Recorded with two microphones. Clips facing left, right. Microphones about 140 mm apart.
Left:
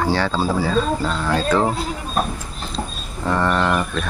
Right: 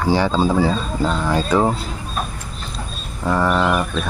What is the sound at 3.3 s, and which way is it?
Speech, 10° right (ahead or behind).